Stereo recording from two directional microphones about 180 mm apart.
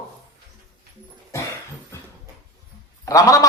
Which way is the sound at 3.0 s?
20° left (ahead or behind).